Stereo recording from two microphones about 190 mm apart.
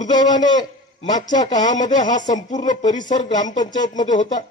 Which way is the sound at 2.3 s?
40° left (ahead or behind).